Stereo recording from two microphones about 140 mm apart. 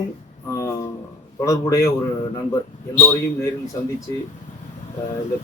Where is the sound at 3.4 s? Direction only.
25° left (ahead or behind).